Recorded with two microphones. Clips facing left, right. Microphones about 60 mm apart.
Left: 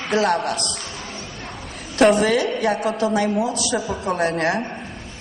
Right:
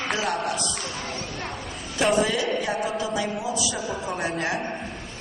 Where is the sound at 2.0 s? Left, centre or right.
Left.